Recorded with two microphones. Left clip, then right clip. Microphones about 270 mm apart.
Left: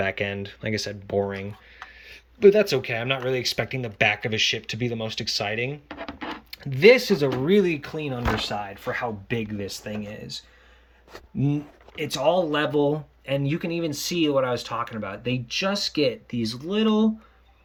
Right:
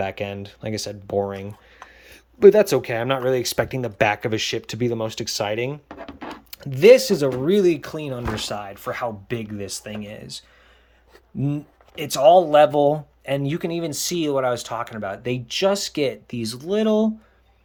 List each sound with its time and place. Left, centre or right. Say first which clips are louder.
0.0 s speech: left 1 dB; centre
6.1 s a sound: left 1 dB; right
6.5 s speech: right 4 dB; centre